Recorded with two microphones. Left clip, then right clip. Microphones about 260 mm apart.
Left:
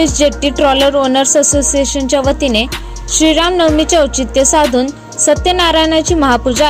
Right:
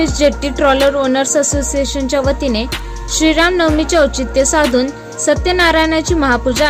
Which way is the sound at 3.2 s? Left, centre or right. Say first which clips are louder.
Left 2 dB; centre.